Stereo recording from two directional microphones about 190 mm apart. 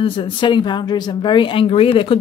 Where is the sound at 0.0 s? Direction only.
25° left (ahead or behind).